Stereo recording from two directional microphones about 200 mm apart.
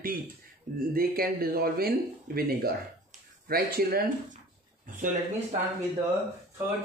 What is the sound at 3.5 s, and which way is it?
Speech, 50° right (ahead or behind).